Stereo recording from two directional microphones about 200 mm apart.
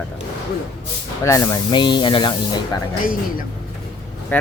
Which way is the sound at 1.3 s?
15° left (ahead or behind).